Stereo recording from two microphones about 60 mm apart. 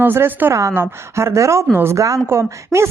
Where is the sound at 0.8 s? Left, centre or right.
Right.